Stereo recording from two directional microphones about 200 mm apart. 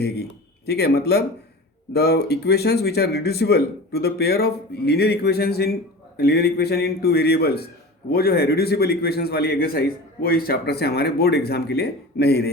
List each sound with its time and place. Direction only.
0.0 s a man's voice: 55° left (ahead or behind)